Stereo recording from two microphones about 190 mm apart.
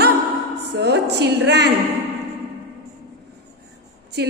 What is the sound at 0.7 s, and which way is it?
A woman's voice, 60° right (ahead or behind).